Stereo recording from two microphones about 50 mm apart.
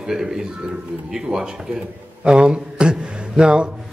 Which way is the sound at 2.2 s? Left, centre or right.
Centre.